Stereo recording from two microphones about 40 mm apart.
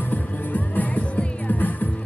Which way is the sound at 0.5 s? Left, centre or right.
Left.